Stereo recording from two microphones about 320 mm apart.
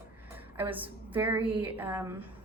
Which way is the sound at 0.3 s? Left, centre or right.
Centre.